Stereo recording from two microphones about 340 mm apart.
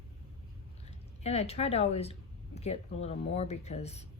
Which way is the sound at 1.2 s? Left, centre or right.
Centre.